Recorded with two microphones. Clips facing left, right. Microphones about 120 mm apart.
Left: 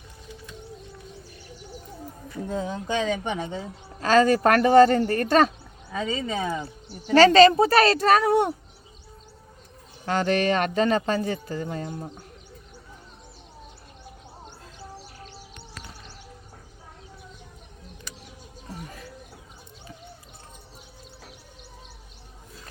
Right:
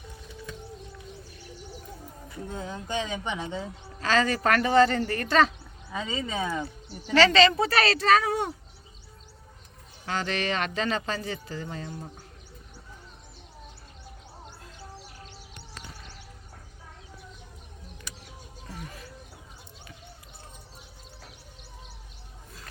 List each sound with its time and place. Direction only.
2.5 s speech: 90° left
3.2 s speech: 50° left (ahead or behind)
6.1 s speech: 35° left (ahead or behind); by 8.5 s 60° left (ahead or behind)
10.1 s speech: 50° left (ahead or behind)